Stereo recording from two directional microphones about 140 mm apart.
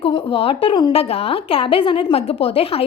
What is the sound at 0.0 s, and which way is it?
A woman's voice, 40° left (ahead or behind).